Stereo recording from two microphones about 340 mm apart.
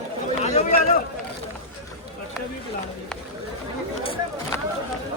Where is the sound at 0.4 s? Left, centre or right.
Left.